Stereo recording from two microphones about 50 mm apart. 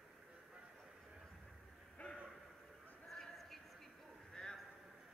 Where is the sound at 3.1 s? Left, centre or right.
Centre.